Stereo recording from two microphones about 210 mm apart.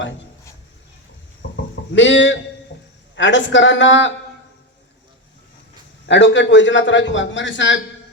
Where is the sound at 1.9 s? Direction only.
60° left (ahead or behind).